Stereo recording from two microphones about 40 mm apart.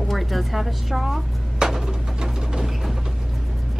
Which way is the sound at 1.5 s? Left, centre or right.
Centre.